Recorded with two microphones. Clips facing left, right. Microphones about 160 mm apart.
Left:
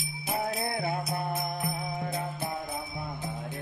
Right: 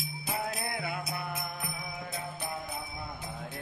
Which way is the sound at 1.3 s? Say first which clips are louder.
Left 6 dB; 40° left (ahead or behind).